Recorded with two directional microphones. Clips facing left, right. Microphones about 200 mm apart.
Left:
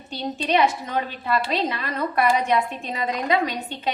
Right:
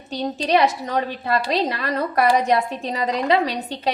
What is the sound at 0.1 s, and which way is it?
A woman's voice, 40° right (ahead or behind).